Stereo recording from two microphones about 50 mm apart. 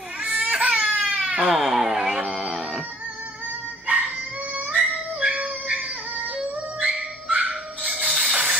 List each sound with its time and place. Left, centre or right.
0.2 s baby cry: right
1.5 s music: centre
3.8 s music: right
4.6 s a sound: centre
5.8 s music: right